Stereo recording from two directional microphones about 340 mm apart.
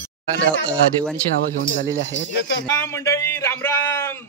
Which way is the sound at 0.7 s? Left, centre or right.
Centre.